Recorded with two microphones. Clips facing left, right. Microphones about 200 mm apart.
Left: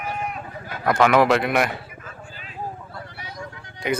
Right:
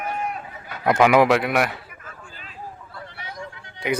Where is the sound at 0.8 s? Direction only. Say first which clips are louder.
Right 1 dB; 10° right (ahead or behind).